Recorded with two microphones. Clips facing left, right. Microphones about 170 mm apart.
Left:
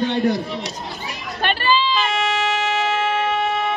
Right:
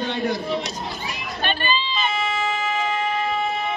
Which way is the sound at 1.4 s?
80° left.